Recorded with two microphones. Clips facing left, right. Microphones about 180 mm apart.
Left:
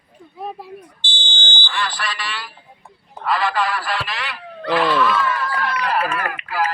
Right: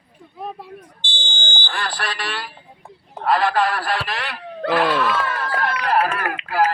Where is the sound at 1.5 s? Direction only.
45° right (ahead or behind).